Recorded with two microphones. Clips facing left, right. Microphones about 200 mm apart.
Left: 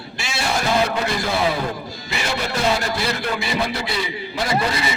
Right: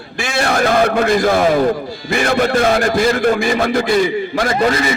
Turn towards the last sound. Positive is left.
turn(degrees=-50)  # may be behind; listen again after turning